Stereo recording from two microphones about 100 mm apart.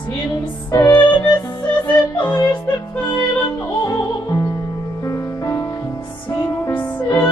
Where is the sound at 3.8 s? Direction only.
40° left (ahead or behind).